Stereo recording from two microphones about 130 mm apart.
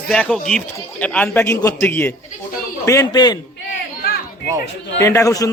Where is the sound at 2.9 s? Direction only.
30° left (ahead or behind).